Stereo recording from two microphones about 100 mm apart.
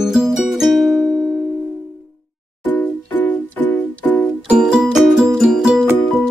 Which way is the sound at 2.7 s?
20° left (ahead or behind).